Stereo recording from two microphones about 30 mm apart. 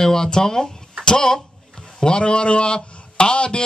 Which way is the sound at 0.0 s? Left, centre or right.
Centre.